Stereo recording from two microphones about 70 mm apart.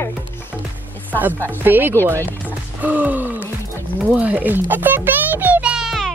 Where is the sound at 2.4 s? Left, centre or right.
Right.